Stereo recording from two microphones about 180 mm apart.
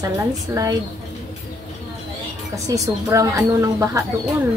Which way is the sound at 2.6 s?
15° right (ahead or behind).